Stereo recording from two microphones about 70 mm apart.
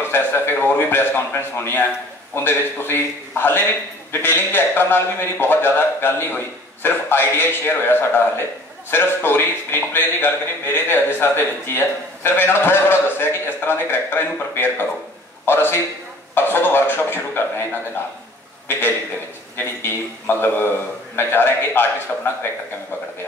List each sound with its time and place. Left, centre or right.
0.0 s a man's voice: left
18.7 s a man's voice: left